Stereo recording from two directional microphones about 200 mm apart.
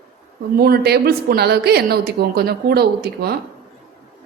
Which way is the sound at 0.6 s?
50° right (ahead or behind).